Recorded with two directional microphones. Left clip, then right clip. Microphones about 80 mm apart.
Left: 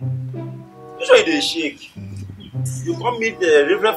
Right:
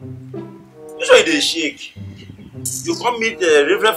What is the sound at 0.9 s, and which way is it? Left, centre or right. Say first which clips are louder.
Speech: right 2 dB; centre.